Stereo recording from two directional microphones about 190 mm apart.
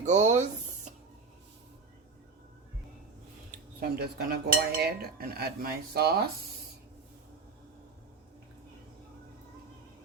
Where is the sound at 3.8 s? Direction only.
55° right (ahead or behind).